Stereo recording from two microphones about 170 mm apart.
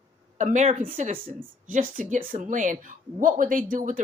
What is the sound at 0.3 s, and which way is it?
Speech, 45° right (ahead or behind).